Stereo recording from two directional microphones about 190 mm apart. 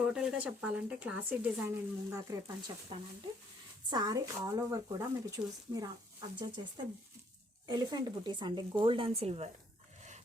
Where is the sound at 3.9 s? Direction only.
20° right (ahead or behind).